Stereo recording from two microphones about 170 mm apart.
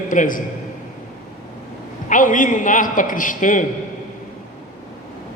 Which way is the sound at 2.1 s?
50° left (ahead or behind).